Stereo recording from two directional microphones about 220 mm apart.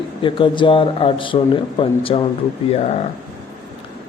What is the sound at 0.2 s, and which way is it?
A man's voice, 20° left (ahead or behind).